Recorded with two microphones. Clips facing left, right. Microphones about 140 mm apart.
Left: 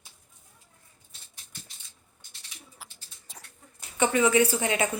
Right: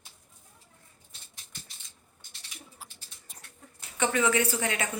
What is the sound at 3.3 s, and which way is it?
Dog, 90° left.